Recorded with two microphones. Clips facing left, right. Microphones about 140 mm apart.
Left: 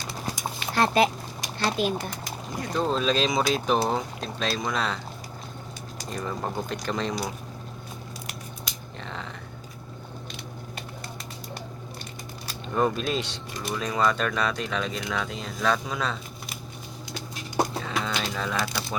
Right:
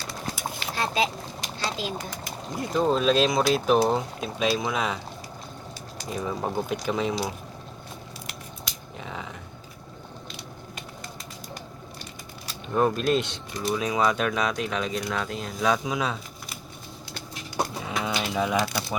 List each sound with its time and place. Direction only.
0.7 s speech: 60° left (ahead or behind)
2.6 s speech: 5° right (ahead or behind)
6.1 s speech: 5° right (ahead or behind)
9.0 s a sound: 5° right (ahead or behind)
12.6 s speech: centre (ahead or behind)
17.8 s typewriter: 15° right (ahead or behind)